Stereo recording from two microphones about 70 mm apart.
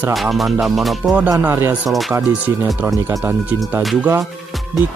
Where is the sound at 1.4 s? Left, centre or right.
Right.